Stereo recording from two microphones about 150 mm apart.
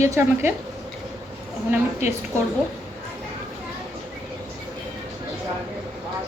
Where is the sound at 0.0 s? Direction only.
20° right (ahead or behind).